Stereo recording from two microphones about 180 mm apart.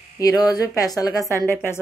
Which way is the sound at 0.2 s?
20° left (ahead or behind).